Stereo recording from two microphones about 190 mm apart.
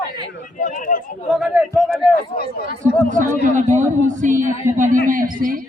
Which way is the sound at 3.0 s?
45° right (ahead or behind).